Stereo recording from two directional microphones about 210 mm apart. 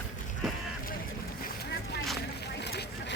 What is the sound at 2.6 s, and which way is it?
Vehicle, 50° left (ahead or behind).